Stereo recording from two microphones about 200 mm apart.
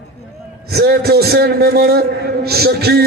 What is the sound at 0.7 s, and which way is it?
A man's voice, 50° right (ahead or behind).